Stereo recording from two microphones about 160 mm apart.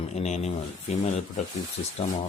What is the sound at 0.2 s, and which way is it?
Speech, 45° left (ahead or behind).